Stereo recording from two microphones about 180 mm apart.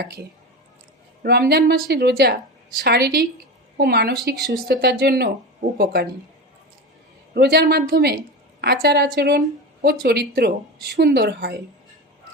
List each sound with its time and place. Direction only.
0.0 s a woman's voice: 60° right (ahead or behind)
7.3 s a woman's voice: 65° right (ahead or behind)